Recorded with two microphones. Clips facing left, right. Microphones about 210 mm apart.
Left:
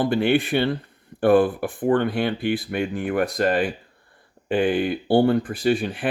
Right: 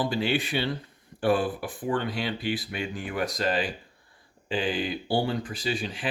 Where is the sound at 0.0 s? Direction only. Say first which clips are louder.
Left 7 dB; 55° left (ahead or behind).